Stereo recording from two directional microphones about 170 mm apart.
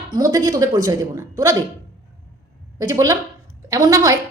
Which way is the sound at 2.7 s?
20° right (ahead or behind).